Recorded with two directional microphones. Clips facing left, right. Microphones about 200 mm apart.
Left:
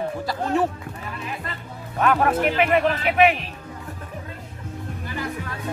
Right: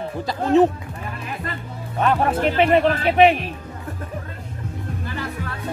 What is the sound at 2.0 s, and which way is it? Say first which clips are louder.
Speech: even; 30° right (ahead or behind).